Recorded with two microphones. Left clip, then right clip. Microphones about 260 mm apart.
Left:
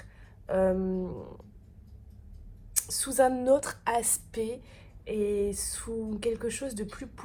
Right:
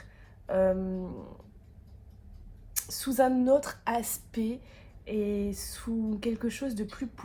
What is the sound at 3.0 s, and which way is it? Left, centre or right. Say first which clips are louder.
Speech: left 1 dB; left.